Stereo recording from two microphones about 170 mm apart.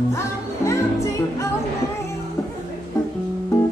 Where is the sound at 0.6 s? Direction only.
15° left (ahead or behind).